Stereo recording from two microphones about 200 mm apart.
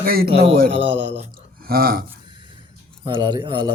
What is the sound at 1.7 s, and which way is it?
Speech, 45° right (ahead or behind).